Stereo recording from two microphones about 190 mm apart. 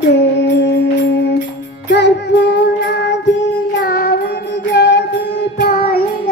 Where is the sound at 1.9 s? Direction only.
65° left (ahead or behind).